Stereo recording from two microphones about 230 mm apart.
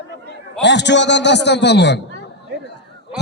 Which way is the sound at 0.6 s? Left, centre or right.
Left.